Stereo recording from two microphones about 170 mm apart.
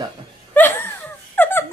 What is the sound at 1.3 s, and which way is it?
Squeak, 10° left (ahead or behind).